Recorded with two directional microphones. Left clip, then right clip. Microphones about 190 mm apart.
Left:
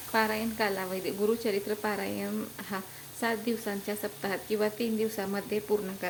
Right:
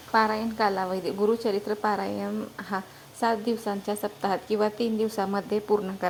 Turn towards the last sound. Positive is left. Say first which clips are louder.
# right 5 dB
turn(degrees=-10)  # may be behind; listen again after turning